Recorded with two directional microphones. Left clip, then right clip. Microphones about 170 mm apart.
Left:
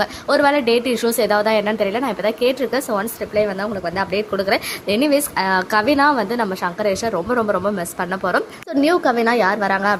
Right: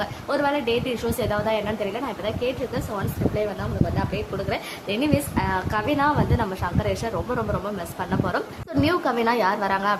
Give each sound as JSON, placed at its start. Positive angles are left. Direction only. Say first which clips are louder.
{"t": 0.0, "sound": "a woman's voice", "louder": "left 8 dB", "side_deg": 35}